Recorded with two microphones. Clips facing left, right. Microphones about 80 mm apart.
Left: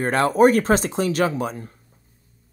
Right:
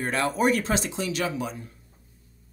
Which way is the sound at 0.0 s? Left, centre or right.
Left.